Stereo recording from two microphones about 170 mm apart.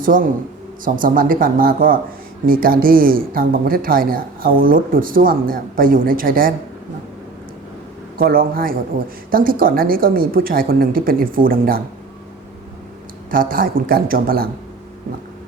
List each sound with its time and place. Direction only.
0.0 s a man's voice: 55° right (ahead or behind)
8.2 s speech: 60° right (ahead or behind)
13.3 s speech: 55° right (ahead or behind)